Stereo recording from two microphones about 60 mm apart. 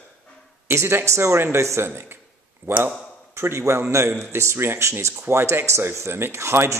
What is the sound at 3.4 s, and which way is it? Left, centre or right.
Speech, right.